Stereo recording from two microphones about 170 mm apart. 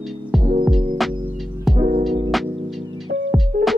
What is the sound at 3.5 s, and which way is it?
Music, 60° right (ahead or behind).